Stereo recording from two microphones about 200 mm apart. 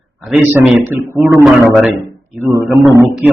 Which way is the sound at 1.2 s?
Centre (ahead or behind).